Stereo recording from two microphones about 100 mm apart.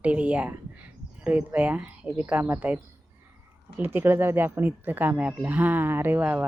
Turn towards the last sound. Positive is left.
turn(degrees=-20)  # may be behind; listen again after turning